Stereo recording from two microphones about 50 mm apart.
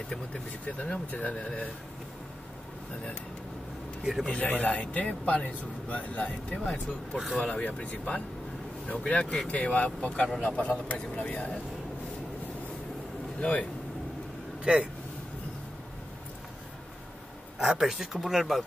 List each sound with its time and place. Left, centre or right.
0.1 s speech: left
4.0 s a man's voice: centre
4.3 s speech: left
13.4 s speech: left
14.6 s speech: right
17.6 s speech: centre